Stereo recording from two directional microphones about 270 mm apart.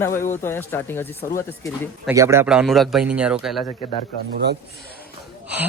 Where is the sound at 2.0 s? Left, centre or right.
Centre.